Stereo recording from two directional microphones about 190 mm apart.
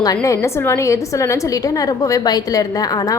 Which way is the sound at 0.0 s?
20° left (ahead or behind).